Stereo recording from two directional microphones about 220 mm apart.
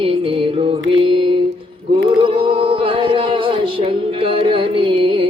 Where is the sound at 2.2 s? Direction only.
25° right (ahead or behind).